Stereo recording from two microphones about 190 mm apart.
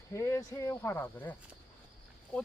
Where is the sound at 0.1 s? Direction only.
15° left (ahead or behind).